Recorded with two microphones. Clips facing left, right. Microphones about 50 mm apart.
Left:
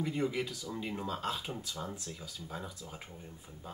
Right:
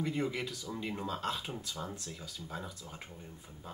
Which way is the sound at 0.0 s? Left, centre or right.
Centre.